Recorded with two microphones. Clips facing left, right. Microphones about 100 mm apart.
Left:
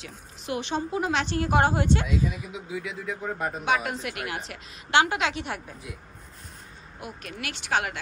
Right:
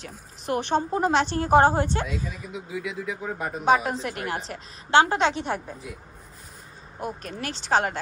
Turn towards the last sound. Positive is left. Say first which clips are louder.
# right 4 dB
turn(degrees=-30)  # may be behind; listen again after turning